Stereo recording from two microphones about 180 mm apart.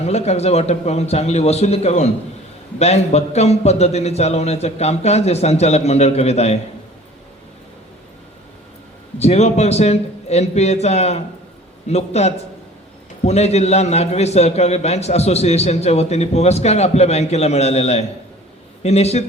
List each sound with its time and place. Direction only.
0.0 s a man's voice: 35° left (ahead or behind)
9.2 s a man's voice: 35° left (ahead or behind)